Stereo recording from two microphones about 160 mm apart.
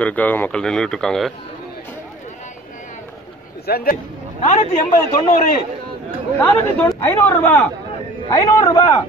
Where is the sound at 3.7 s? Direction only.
70° left (ahead or behind).